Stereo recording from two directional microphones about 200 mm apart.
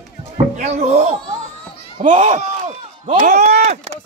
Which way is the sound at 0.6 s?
35° right (ahead or behind).